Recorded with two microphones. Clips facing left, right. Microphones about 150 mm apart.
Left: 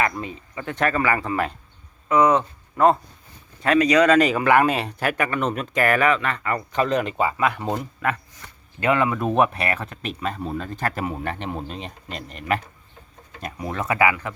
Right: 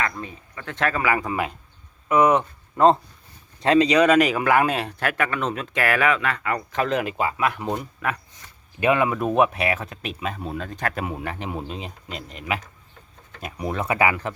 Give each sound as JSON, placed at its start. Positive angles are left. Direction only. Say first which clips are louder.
{"t": 0.0, "sound": "speech", "louder": "left 4 dB", "side_deg": 15}
{"t": 0.6, "sound": "speech", "louder": "left 2 dB", "side_deg": 5}
{"t": 4.0, "sound": "speech", "louder": "left 1 dB", "side_deg": -10}
{"t": 8.8, "sound": "speech", "louder": "right 1 dB", "side_deg": -15}
{"t": 9.1, "sound": "speech", "louder": "even", "side_deg": -5}
{"t": 13.6, "sound": "speech", "louder": "left 1 dB", "side_deg": -15}